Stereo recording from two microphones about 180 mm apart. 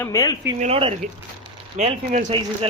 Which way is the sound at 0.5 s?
35° right (ahead or behind).